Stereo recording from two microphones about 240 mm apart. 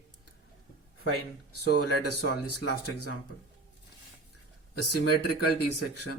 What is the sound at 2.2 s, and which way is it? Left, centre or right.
Speech, left.